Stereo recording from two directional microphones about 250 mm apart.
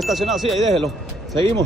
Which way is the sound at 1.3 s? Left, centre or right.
Centre.